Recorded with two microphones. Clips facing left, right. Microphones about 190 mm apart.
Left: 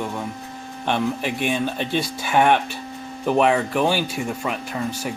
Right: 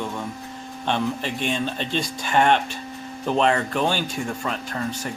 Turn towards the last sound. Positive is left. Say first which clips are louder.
# left 2 dB
turn(degrees=10)  # may be behind; listen again after turning